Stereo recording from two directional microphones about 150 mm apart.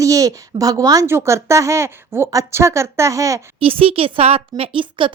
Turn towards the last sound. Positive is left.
turn(degrees=-35)  # may be behind; listen again after turning